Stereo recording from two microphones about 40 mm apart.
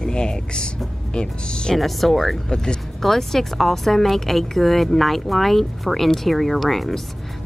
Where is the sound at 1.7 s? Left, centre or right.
Centre.